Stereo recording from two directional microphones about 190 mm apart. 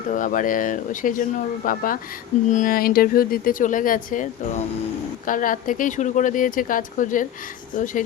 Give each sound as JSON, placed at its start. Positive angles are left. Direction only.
{"t": 0.1, "sound": "speech", "side_deg": 45}